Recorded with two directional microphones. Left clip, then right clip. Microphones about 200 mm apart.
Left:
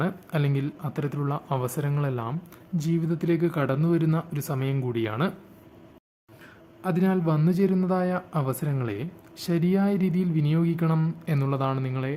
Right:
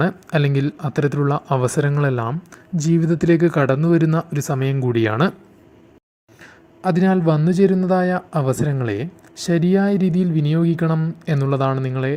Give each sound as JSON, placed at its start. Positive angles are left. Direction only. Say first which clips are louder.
{"t": 0.0, "sound": "speech", "louder": "right 9 dB", "side_deg": -25}
{"t": 6.4, "sound": "speech", "louder": "right 10 dB", "side_deg": -25}